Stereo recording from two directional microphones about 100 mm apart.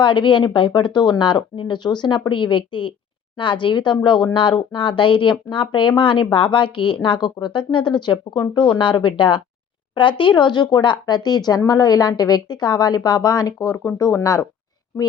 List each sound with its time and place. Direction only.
0.0 s speech: 50° left (ahead or behind); by 14.4 s 30° left (ahead or behind)